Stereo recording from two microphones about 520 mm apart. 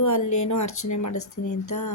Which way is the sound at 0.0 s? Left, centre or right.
Left.